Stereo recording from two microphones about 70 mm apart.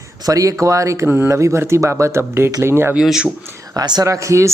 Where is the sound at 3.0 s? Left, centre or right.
Centre.